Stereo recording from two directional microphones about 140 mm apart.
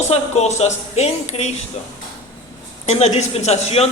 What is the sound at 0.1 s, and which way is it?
A man's voice, 50° left (ahead or behind).